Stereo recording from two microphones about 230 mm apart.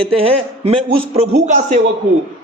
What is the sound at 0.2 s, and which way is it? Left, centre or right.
Speech, right.